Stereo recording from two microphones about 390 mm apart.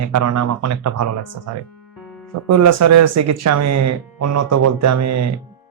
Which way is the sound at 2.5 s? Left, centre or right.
Right.